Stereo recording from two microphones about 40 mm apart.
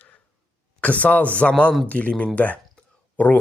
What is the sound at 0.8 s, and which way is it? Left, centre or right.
Speech, left.